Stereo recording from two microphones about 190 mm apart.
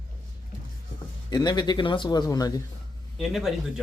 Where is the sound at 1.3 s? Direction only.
20° left (ahead or behind).